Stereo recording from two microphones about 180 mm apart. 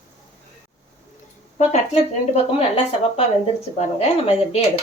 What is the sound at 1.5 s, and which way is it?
Speech, 35° left (ahead or behind).